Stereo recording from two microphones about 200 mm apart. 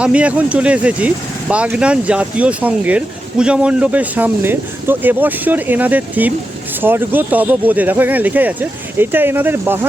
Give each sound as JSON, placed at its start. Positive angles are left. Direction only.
{"t": 0.0, "sound": "speech", "side_deg": -5}